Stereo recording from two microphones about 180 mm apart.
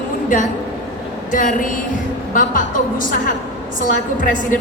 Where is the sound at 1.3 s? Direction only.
45° left (ahead or behind).